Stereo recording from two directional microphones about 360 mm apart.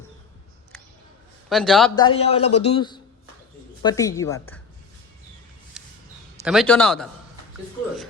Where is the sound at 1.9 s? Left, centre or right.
Centre.